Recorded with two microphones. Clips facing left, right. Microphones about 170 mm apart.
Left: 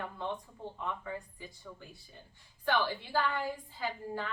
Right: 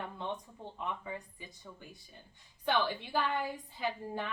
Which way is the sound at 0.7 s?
20° right (ahead or behind).